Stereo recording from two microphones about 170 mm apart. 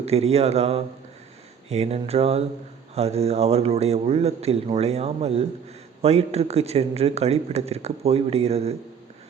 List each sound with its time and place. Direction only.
0.0 s speech: 35° right (ahead or behind)